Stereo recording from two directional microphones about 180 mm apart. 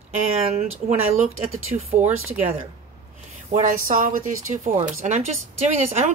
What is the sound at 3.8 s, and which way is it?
Speech, 45° right (ahead or behind).